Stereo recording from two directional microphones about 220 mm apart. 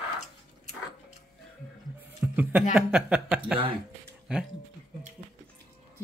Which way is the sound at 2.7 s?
5° right (ahead or behind).